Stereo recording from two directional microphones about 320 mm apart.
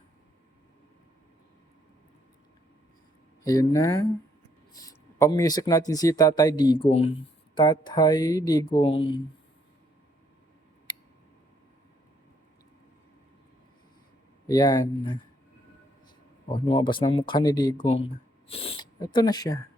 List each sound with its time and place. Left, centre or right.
3.4 s speech: centre
14.4 s speech: centre
16.5 s speech: centre